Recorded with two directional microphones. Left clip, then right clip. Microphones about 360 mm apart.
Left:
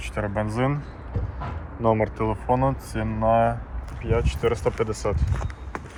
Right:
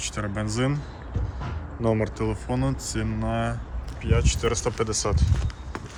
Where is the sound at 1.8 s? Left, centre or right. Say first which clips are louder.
Left 3 dB; centre.